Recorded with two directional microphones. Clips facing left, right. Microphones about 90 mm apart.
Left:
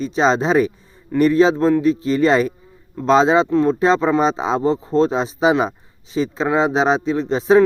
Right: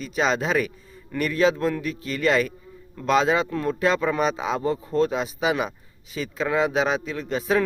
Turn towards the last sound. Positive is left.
turn(degrees=30)  # may be behind; listen again after turning